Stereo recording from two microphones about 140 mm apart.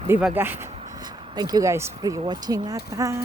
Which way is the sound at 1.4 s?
30° right (ahead or behind).